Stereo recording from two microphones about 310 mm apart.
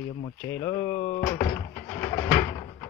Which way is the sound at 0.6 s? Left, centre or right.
Centre.